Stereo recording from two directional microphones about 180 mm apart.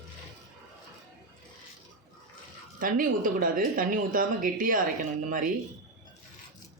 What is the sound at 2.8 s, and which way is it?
Speech, 50° right (ahead or behind).